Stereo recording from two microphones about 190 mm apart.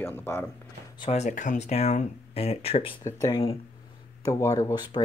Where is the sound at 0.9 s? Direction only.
30° left (ahead or behind).